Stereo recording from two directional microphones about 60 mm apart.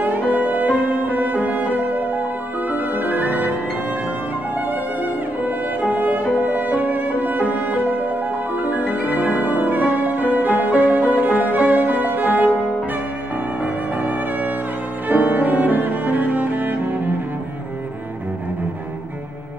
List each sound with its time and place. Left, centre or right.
0.0 s music: right
5.4 s violin: right
15.0 s cello: right